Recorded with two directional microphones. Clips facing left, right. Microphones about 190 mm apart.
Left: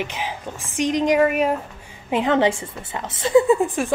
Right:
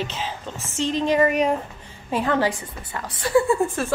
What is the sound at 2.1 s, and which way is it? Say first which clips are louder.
A woman's voice: left 3 dB; 20° left (ahead or behind).